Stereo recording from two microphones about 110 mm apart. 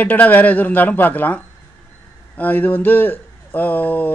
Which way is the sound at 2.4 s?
15° left (ahead or behind).